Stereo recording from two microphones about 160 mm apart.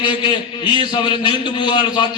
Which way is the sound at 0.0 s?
30° left (ahead or behind).